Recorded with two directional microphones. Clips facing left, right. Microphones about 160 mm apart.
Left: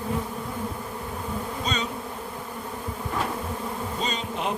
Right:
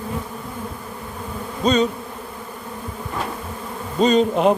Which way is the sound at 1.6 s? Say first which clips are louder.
Right 14 dB; 35° right (ahead or behind).